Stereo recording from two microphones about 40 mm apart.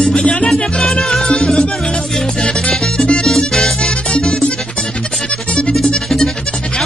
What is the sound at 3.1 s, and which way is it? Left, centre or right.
Music, centre.